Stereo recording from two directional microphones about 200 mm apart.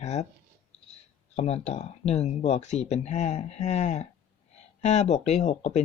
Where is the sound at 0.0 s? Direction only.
35° left (ahead or behind).